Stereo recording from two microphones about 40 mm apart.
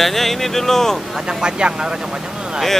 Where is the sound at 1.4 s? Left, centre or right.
Right.